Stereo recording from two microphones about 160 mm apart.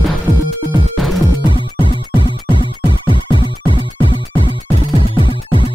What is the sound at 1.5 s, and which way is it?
Music, 30° left (ahead or behind).